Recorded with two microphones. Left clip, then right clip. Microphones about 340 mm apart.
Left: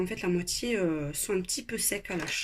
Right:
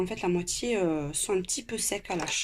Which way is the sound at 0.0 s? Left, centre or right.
Centre.